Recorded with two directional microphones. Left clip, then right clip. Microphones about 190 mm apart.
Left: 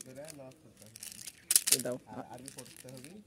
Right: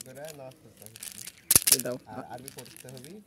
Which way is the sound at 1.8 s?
Centre (ahead or behind).